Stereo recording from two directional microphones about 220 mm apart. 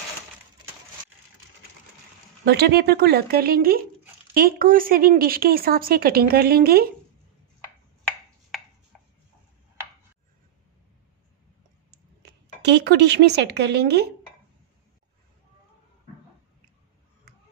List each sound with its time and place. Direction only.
2.4 s a woman's voice: 45° right (ahead or behind)
11.9 s speech: 50° right (ahead or behind)